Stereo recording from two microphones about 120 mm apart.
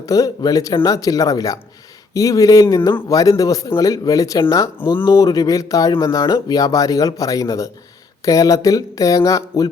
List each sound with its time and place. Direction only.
0.0 s speech: 30° left (ahead or behind)